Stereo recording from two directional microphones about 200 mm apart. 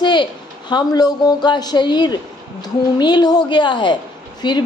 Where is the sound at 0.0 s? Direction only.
20° left (ahead or behind).